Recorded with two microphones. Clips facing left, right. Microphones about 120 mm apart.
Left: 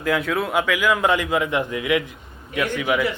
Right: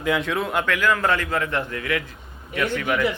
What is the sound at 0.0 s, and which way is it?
A man's voice, centre (ahead or behind).